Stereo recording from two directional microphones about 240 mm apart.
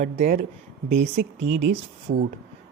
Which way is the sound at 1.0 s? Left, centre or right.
Right.